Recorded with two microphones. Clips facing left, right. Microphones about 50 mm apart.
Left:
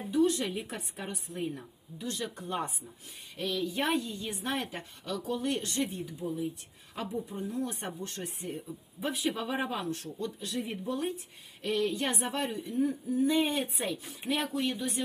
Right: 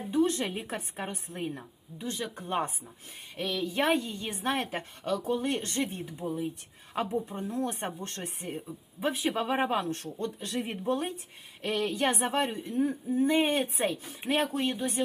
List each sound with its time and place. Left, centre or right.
0.1 s a woman's voice: right